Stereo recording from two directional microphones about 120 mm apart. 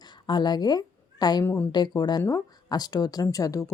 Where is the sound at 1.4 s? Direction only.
20° left (ahead or behind).